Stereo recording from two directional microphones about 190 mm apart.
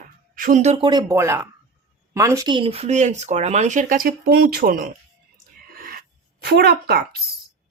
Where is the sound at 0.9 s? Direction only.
20° right (ahead or behind); by 4.9 s 50° right (ahead or behind).